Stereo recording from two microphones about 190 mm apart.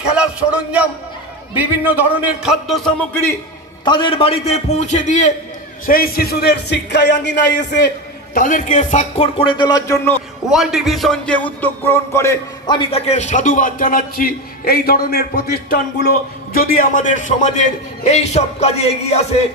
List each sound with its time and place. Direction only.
0.1 s a sound: 5° right (ahead or behind)
1.5 s a man's voice: 10° right (ahead or behind); by 3.3 s 10° left (ahead or behind)
3.8 s a man's voice: 25° left (ahead or behind)
5.9 s a man's voice: 50° left (ahead or behind)
8.4 s a man's voice: 45° left (ahead or behind); by 10.1 s 15° left (ahead or behind)
10.5 s a man's voice: centre (ahead or behind); by 15.4 s 55° left (ahead or behind)
16.5 s a man's voice: 50° left (ahead or behind)